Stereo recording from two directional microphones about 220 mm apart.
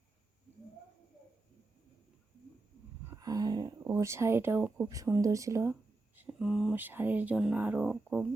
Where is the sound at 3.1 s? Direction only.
15° right (ahead or behind).